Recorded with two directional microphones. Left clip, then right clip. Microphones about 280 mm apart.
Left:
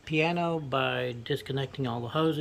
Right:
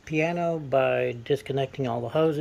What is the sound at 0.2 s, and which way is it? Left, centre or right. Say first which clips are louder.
Speech: right 2 dB; centre.